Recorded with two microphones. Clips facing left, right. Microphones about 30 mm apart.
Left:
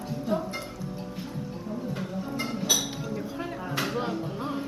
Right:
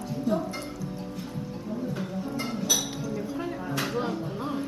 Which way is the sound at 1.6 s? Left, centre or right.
Centre.